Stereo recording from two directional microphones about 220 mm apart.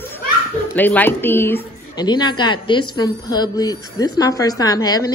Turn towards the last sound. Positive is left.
turn(degrees=15)  # may be behind; listen again after turning